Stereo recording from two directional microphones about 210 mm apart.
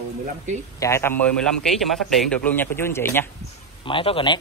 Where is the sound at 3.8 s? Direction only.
25° left (ahead or behind).